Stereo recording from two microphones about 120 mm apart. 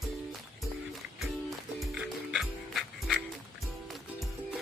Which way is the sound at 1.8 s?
5° right (ahead or behind).